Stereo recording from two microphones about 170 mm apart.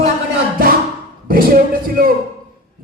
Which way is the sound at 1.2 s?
60° right (ahead or behind).